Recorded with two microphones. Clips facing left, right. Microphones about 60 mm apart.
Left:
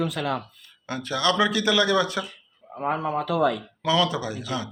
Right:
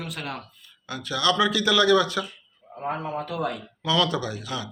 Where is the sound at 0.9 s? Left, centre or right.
Left.